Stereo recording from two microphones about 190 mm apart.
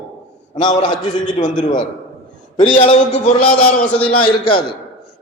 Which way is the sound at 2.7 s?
35° left (ahead or behind).